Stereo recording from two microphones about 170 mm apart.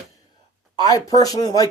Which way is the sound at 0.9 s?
20° left (ahead or behind).